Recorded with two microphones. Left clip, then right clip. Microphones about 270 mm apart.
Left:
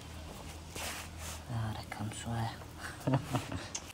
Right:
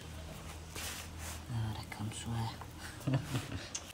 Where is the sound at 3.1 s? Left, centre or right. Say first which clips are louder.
Left 4 dB; centre.